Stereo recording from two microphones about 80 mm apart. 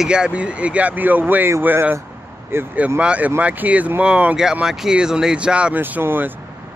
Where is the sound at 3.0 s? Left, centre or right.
Centre.